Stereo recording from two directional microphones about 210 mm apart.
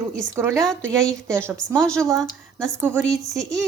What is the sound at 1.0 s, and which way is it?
Speech, 5° left (ahead or behind).